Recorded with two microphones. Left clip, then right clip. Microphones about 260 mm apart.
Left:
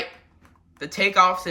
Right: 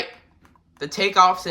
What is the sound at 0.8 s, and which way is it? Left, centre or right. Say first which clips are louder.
Speech: right 1 dB; centre.